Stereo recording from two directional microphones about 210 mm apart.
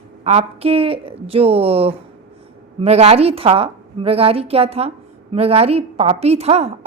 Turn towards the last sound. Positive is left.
turn(degrees=-30)  # may be behind; listen again after turning